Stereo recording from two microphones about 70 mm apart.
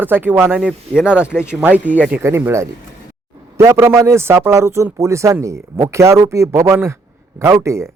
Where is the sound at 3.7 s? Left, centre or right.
Right.